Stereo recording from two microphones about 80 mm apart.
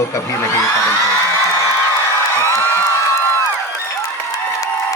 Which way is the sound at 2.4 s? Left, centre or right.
Left.